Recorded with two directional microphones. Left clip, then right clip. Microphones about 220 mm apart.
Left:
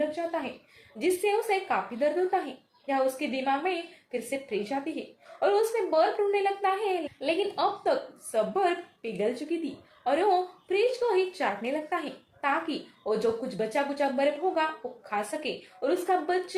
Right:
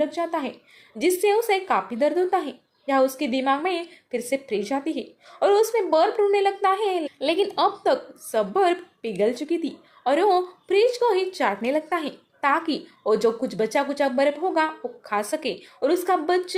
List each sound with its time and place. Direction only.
0.1 s a woman's voice: 45° right (ahead or behind)